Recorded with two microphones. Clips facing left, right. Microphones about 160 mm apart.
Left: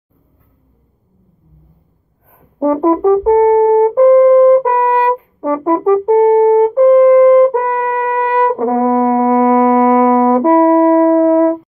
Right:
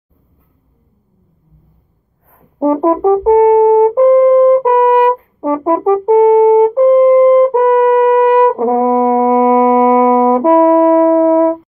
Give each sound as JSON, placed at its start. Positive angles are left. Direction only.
{"t": 2.6, "sound": "brass instrument", "side_deg": -20}